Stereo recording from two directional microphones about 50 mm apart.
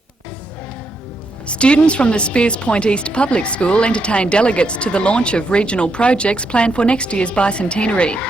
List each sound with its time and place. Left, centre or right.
1.5 s speech: left